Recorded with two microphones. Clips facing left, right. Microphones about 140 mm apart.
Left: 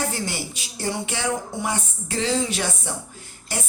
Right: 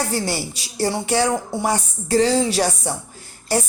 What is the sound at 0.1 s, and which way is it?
Speech, 35° right (ahead or behind).